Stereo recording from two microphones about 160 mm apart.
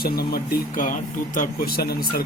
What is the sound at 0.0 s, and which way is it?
Speech, 75° left (ahead or behind).